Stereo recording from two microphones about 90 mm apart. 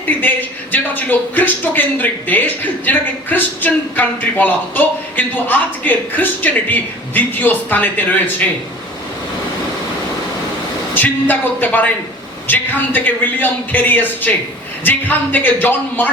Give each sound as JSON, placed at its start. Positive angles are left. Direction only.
{"t": 0.2, "sound": "speech", "side_deg": 20}
{"t": 10.9, "sound": "speech", "side_deg": 20}